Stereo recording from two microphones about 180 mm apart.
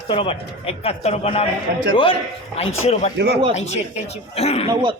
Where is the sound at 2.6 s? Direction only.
40° left (ahead or behind).